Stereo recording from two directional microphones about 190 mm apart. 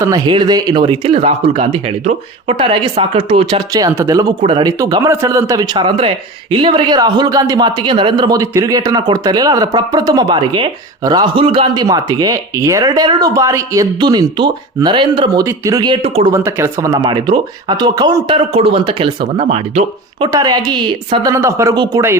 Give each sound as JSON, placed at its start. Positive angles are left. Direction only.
{"t": 0.0, "sound": "a man's voice", "side_deg": -20}
{"t": 16.3, "sound": "a man's voice", "side_deg": -15}